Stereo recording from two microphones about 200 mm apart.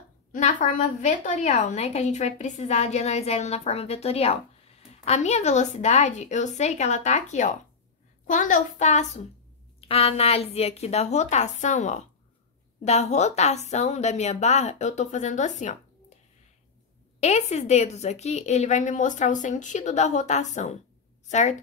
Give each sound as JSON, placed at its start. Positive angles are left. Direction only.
{"t": 0.3, "sound": "a woman's voice", "side_deg": 40}
{"t": 17.2, "sound": "a woman's voice", "side_deg": 35}